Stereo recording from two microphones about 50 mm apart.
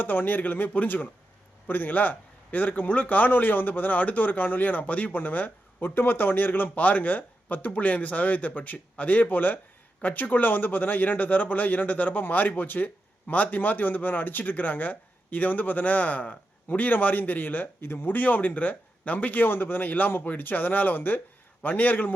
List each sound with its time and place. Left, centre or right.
0.0 s speech: left